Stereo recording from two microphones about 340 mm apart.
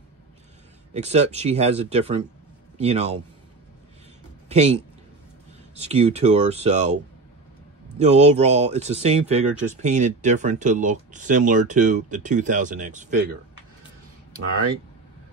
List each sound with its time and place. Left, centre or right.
0.9 s speech: centre
4.5 s speech: centre
8.0 s speech: centre